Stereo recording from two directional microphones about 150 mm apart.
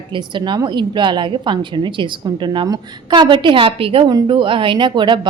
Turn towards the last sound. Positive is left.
turn(degrees=-30)  # may be behind; listen again after turning